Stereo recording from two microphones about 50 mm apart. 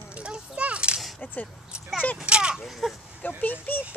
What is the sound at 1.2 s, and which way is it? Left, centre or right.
Speech, left.